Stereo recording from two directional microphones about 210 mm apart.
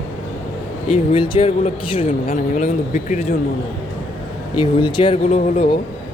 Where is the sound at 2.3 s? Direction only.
35° left (ahead or behind).